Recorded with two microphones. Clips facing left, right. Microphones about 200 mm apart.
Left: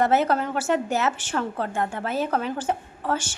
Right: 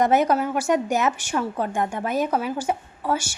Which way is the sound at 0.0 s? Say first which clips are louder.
Right 2 dB; 15° right (ahead or behind).